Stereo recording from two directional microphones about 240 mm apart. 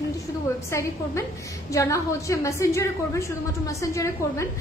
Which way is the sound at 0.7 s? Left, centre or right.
Centre.